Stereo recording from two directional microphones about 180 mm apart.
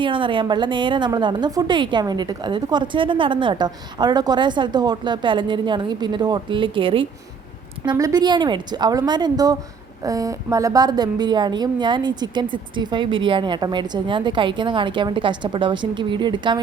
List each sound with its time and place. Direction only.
0.0 s a woman's voice: 30° right (ahead or behind)